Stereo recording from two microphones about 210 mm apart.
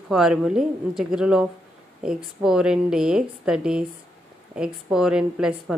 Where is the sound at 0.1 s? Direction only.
Centre (ahead or behind).